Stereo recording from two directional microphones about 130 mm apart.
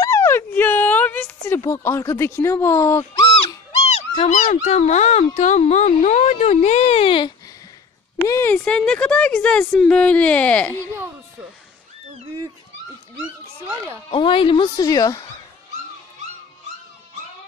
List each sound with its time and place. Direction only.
0.0 s a sound: 20° left (ahead or behind)
1.6 s speech: 20° left (ahead or behind)
3.8 s a sound: 55° left (ahead or behind); by 4.6 s 80° left
4.6 s speech: 55° left (ahead or behind); by 7.3 s 40° left (ahead or behind)
8.2 s speech: 20° left (ahead or behind)
8.5 s speech: 10° left (ahead or behind)
14.1 s speech: 45° left (ahead or behind)